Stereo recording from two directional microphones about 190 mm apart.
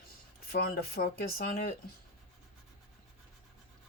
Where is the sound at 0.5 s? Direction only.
55° left (ahead or behind).